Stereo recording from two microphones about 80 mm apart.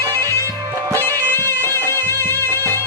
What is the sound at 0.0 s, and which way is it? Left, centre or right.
Music, left.